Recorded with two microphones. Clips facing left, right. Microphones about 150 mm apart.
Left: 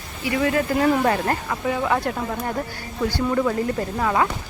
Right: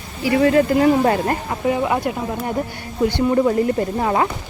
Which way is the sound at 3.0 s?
25° right (ahead or behind).